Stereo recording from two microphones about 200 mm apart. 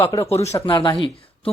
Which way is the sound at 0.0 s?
15° left (ahead or behind).